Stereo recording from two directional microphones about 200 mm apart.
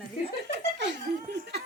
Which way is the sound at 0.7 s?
60° right (ahead or behind).